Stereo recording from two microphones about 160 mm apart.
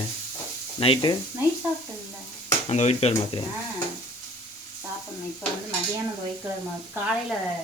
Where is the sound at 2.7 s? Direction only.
40° left (ahead or behind).